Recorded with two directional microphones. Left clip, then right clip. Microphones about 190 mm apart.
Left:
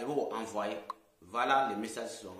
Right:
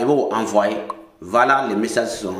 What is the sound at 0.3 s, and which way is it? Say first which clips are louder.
A man's voice: right 18 dB; 20° right (ahead or behind).